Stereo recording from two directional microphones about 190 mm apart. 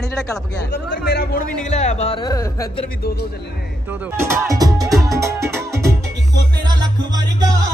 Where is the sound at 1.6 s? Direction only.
35° left (ahead or behind); by 2.7 s 20° left (ahead or behind).